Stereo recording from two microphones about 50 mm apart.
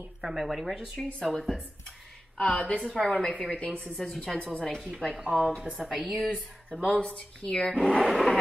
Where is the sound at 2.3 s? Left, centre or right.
Left.